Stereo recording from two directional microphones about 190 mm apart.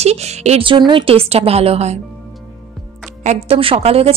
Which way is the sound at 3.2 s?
35° right (ahead or behind).